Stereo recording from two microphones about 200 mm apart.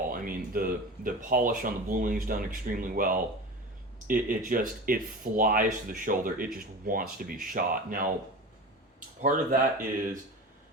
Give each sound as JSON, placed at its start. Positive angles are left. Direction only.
{"t": 0.1, "sound": "speech", "side_deg": -45}
{"t": 9.2, "sound": "speech", "side_deg": -40}